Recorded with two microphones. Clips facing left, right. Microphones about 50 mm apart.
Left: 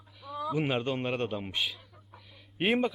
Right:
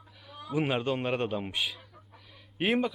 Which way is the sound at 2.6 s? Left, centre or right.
Centre.